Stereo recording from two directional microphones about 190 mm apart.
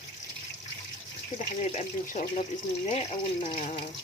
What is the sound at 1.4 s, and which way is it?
Speech, 40° left (ahead or behind).